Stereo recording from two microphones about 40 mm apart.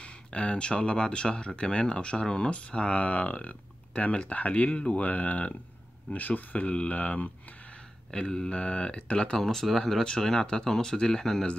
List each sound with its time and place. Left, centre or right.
0.0 s speech: left
6.7 s speech: left
7.0 s speech: left
8.1 s speech: centre
9.4 s speech: centre